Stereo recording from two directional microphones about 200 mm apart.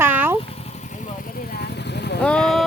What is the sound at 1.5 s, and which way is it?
Vehicle, 55° left (ahead or behind).